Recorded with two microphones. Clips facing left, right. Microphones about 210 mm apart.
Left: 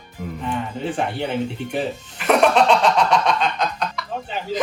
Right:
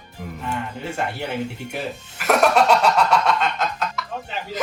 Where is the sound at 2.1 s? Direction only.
5° right (ahead or behind).